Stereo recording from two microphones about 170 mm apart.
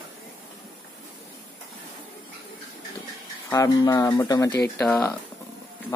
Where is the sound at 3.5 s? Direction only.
20° left (ahead or behind).